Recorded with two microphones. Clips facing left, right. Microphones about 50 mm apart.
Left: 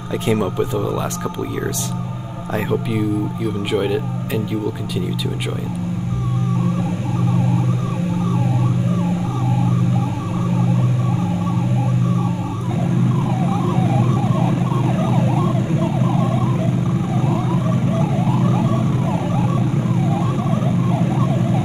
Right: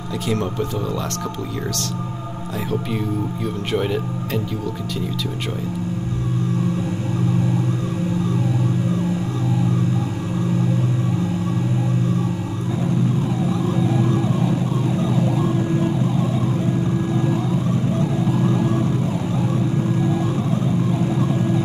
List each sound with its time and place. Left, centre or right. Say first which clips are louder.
0.3 s speech: left 4 dB; centre
3.7 s speech: left 2 dB; centre
13.5 s emergency vehicle: left 1 dB; left
17.3 s vehicle: left 1 dB; left
20.2 s emergency vehicle: left 1 dB; left